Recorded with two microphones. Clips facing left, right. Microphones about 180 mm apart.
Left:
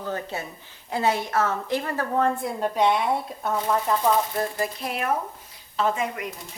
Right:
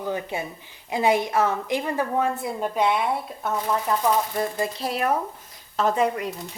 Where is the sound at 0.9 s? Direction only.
15° right (ahead or behind).